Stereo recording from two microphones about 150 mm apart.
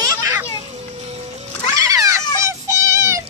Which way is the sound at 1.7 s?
20° right (ahead or behind).